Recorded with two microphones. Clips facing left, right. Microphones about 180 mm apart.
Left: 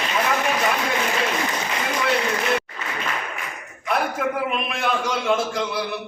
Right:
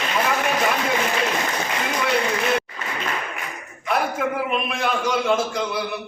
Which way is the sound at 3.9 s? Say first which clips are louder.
Even; centre (ahead or behind).